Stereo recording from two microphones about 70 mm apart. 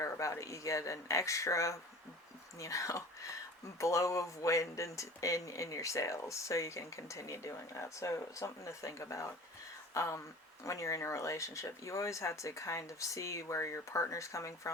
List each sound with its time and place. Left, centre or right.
0.0 s speech: left